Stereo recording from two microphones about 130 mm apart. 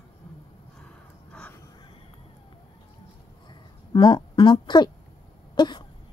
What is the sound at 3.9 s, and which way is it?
Speech, 35° left (ahead or behind).